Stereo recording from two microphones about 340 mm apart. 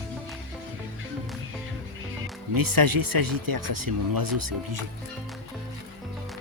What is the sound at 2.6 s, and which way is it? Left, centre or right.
Speech, right.